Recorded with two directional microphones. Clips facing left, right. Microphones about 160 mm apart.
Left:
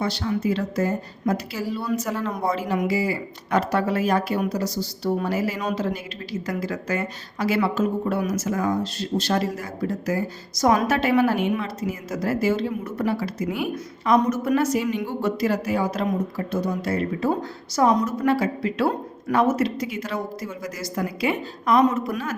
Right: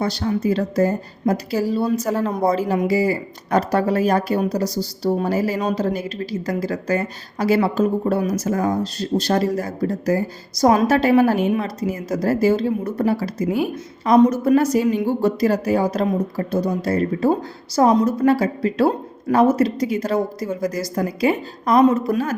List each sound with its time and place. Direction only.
0.0 s speech: 40° right (ahead or behind)